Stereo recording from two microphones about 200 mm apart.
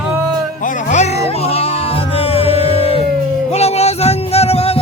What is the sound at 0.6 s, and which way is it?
Music, 40° left (ahead or behind).